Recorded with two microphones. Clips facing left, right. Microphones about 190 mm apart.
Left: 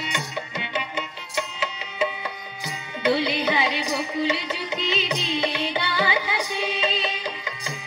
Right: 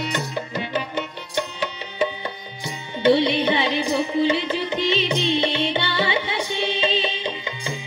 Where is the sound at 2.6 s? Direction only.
30° right (ahead or behind).